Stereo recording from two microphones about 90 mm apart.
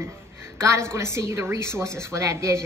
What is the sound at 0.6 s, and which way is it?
A woman's voice, 30° right (ahead or behind).